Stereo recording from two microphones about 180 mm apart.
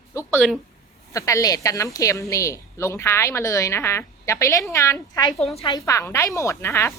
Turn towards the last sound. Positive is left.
turn(degrees=15)  # may be behind; listen again after turning